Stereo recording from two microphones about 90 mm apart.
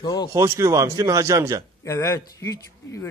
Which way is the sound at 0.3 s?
35° right (ahead or behind).